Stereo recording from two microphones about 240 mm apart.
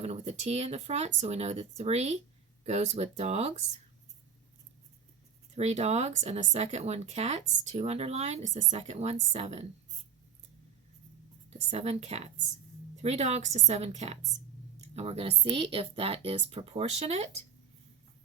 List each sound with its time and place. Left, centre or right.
0.0 s a woman's voice: right
5.5 s a woman's voice: right
11.7 s a woman's voice: right